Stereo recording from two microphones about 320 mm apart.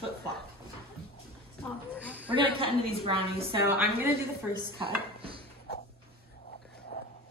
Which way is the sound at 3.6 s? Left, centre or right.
Centre.